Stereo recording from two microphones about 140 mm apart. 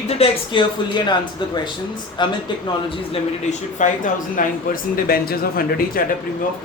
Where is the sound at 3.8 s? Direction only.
70° left (ahead or behind); by 6.0 s 90° left.